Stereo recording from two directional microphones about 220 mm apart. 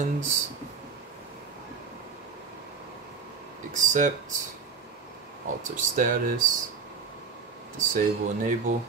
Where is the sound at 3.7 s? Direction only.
35° right (ahead or behind).